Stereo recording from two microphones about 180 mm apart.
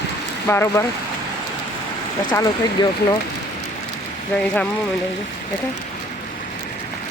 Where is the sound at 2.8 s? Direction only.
25° left (ahead or behind).